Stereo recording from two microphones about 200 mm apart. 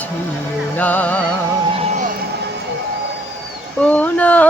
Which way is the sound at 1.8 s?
35° right (ahead or behind).